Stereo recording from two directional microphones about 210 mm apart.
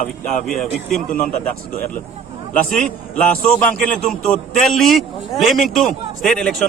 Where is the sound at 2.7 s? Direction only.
5° left (ahead or behind).